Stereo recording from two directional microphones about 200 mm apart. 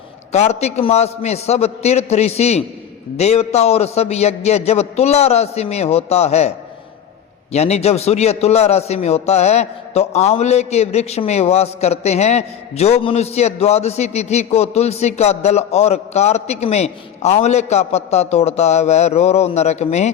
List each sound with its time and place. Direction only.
0.3 s a man's voice: 35° left (ahead or behind)
7.5 s a man's voice: 30° left (ahead or behind)